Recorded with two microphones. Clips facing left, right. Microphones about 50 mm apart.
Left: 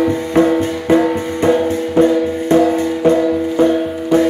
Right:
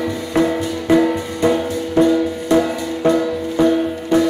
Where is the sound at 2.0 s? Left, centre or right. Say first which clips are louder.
Left 2 dB; left.